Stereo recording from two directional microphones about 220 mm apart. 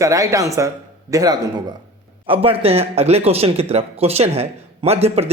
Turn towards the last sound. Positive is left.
turn(degrees=-30)  # may be behind; listen again after turning